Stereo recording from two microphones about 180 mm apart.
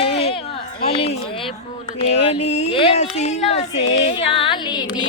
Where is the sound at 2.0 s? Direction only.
35° left (ahead or behind).